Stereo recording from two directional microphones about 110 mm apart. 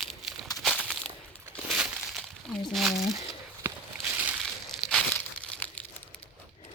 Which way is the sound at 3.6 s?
20° right (ahead or behind).